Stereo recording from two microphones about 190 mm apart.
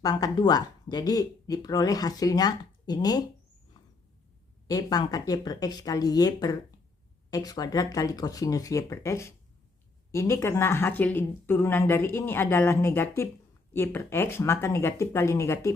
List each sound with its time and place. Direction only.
0.0 s speech: 20° left (ahead or behind)
4.7 s speech: 20° left (ahead or behind)